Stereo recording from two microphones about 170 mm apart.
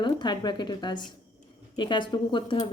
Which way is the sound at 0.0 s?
25° left (ahead or behind).